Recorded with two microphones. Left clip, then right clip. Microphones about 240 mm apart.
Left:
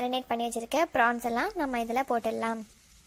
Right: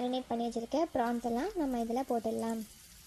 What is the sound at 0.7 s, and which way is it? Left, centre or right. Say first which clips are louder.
Speech: left 8 dB; left.